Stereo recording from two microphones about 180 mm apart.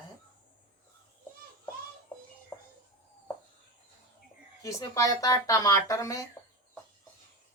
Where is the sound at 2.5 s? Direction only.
10° left (ahead or behind).